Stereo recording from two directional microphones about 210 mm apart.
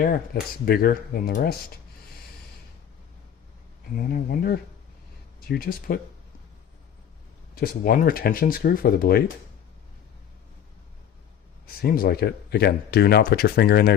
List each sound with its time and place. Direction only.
0.6 s speech: 45° left (ahead or behind)
3.9 s speech: 45° left (ahead or behind)
7.5 s speech: 45° left (ahead or behind)
11.6 s speech: 45° left (ahead or behind)